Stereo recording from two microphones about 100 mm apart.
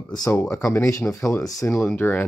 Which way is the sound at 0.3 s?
25° left (ahead or behind).